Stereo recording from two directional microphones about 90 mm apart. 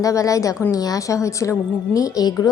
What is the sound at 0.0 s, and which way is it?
A woman's voice, 40° left (ahead or behind).